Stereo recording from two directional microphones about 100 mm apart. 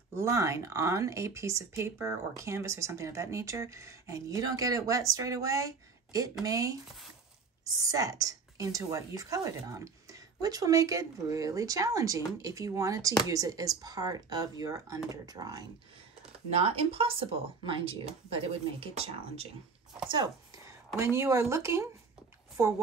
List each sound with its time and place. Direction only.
0.1 s speech: 30° right (ahead or behind)
16.4 s speech: 90° right
20.1 s speech: 45° right (ahead or behind)
20.6 s speech: 25° right (ahead or behind)